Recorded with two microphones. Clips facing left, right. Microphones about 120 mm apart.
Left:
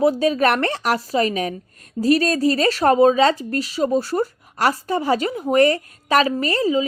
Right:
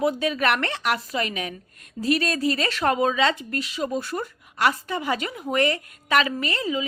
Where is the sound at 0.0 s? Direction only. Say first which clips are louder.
Left 6 dB; 35° left (ahead or behind).